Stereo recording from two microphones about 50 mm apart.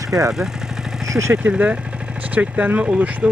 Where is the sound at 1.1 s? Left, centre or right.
Right.